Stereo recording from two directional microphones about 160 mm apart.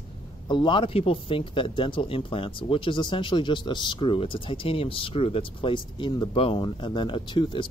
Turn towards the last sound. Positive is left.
turn(degrees=30)  # may be behind; listen again after turning